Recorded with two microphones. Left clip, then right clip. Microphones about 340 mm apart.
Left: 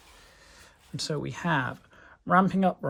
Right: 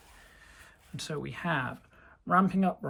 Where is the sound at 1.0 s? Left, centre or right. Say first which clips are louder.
Left 4 dB; centre.